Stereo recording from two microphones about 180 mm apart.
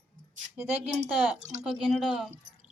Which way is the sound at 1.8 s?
Centre (ahead or behind).